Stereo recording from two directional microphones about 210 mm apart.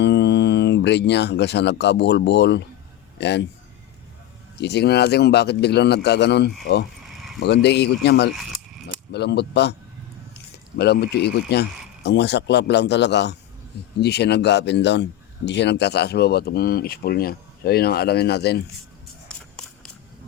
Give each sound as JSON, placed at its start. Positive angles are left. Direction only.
{"t": 0.0, "sound": "a man's voice", "side_deg": 55}
{"t": 4.5, "sound": "speech", "side_deg": 55}
{"t": 10.8, "sound": "a man's voice", "side_deg": 50}